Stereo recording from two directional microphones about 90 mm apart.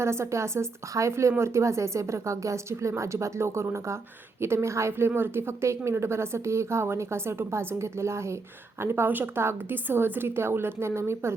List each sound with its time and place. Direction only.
0.0 s a woman's voice: 30° right (ahead or behind)